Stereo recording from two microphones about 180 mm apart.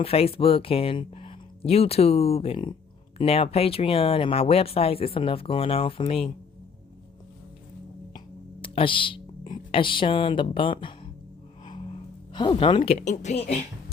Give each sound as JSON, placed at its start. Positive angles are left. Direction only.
{"t": 0.0, "sound": "speech", "side_deg": 35}
{"t": 8.6, "sound": "speech", "side_deg": 30}
{"t": 11.6, "sound": "music", "side_deg": 25}
{"t": 13.0, "sound": "speech", "side_deg": 40}